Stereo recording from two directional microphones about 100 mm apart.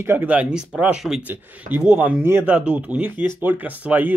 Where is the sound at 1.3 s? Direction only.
20° right (ahead or behind).